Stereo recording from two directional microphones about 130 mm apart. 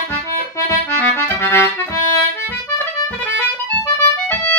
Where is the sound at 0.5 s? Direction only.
20° left (ahead or behind).